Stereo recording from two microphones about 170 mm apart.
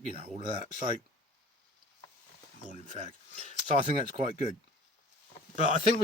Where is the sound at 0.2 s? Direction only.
35° right (ahead or behind).